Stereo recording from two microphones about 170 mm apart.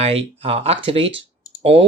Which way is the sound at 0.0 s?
35° right (ahead or behind).